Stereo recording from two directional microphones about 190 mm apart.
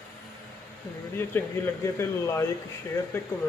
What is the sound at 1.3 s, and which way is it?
Speech, 10° left (ahead or behind).